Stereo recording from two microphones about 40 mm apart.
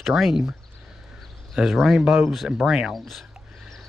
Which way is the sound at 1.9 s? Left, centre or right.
Centre.